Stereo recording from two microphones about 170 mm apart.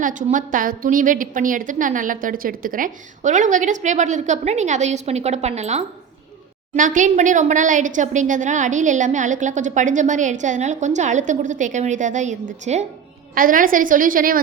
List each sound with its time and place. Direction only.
0.0 s a woman's voice: 50° right (ahead or behind)
13.3 s a woman's voice: 55° right (ahead or behind)